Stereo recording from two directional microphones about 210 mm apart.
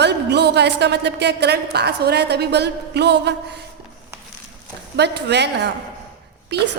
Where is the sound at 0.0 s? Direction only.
55° right (ahead or behind).